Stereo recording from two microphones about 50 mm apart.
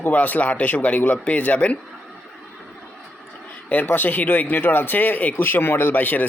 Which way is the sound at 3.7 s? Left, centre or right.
Left.